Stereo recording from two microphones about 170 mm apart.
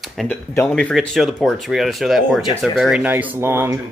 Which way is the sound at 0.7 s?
5° left (ahead or behind).